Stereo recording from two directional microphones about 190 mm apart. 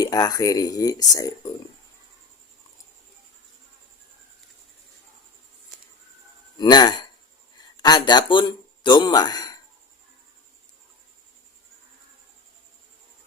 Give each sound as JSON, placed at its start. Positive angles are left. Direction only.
{"t": 0.0, "sound": "speech", "side_deg": 20}
{"t": 6.6, "sound": "speech", "side_deg": 20}